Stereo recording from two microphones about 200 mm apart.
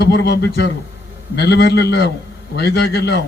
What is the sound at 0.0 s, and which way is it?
A man's voice, 55° left (ahead or behind).